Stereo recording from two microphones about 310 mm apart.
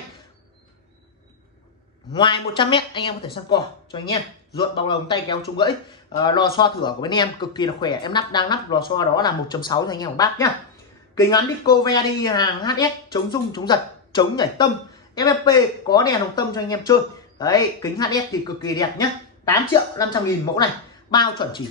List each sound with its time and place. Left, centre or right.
2.1 s speech: centre